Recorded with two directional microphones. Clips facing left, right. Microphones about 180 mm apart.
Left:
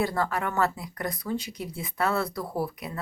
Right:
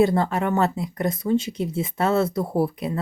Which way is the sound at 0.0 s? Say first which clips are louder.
Right 8 dB; 25° right (ahead or behind).